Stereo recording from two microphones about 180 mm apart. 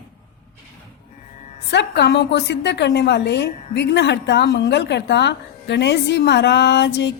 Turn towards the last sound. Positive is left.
turn(degrees=75)  # may be behind; listen again after turning